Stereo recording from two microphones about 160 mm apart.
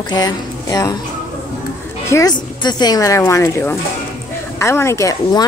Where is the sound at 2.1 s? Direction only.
15° left (ahead or behind).